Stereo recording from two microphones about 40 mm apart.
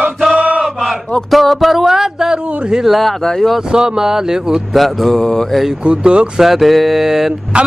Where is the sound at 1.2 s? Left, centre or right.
Centre.